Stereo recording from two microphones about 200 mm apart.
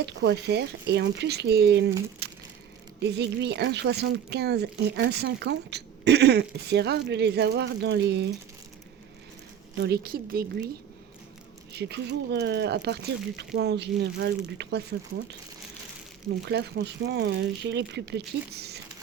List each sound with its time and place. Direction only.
0.0 s speech: 60° right (ahead or behind)
2.2 s crumpling: 50° right (ahead or behind)
3.0 s speech: 60° right (ahead or behind)
9.7 s a woman's voice: 55° right (ahead or behind)
11.7 s speech: 55° right (ahead or behind)
16.5 s speech: 55° right (ahead or behind)